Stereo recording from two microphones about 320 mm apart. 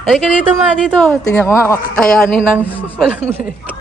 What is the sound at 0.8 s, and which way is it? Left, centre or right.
Speech, centre.